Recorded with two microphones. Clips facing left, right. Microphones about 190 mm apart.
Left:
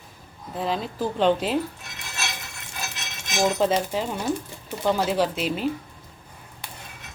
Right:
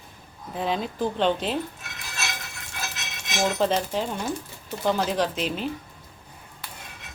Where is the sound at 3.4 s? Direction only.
5° left (ahead or behind).